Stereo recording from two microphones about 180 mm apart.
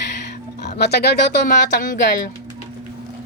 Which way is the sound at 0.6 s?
65° left (ahead or behind).